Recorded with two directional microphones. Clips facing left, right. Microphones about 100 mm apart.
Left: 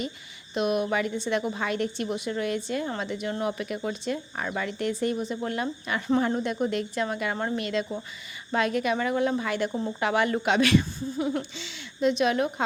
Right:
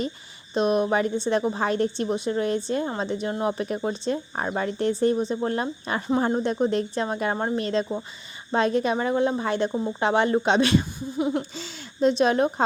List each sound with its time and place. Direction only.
0.5 s a woman's voice: 35° right (ahead or behind)
11.5 s speech: 40° right (ahead or behind)